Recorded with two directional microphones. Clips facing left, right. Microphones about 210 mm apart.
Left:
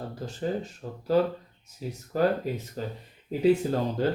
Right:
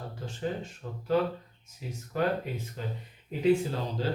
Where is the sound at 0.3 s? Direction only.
40° left (ahead or behind).